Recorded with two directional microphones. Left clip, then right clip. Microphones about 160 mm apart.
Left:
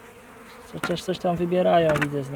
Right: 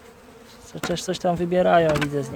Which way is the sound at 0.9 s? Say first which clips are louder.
Right 2 dB; 20° right (ahead or behind).